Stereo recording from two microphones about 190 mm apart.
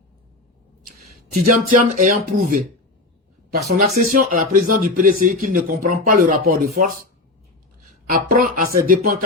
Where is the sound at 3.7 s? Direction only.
40° right (ahead or behind).